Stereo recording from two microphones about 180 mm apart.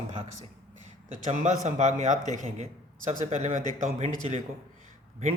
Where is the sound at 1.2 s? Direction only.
40° right (ahead or behind).